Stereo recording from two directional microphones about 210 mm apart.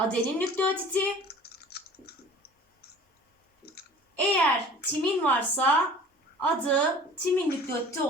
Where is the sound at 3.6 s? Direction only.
50° left (ahead or behind).